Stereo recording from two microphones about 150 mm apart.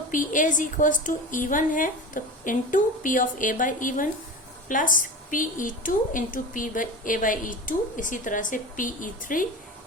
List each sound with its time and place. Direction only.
0.1 s a woman's voice: 60° left (ahead or behind)